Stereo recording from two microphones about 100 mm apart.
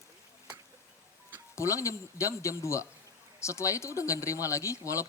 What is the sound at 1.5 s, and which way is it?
Speech, 30° left (ahead or behind).